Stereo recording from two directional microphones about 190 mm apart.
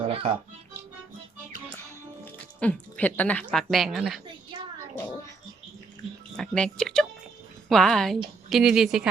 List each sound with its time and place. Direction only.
0.0 s music: 30° right (ahead or behind)
2.6 s speech: 10° left (ahead or behind)
6.3 s speech: 5° left (ahead or behind)